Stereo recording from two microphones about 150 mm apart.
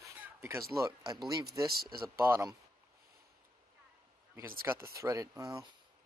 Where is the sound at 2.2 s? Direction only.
15° right (ahead or behind).